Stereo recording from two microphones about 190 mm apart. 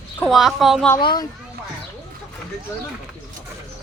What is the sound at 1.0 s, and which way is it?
Speech, 25° left (ahead or behind).